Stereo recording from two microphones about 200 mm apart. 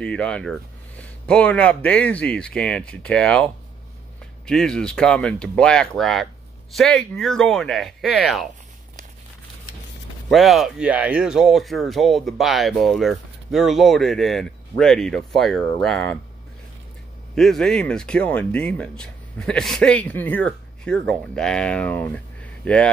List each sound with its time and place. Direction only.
0.0 s speech: 5° left (ahead or behind)
4.5 s speech: 5° left (ahead or behind)
10.3 s speech: centre (ahead or behind)
17.4 s speech: centre (ahead or behind)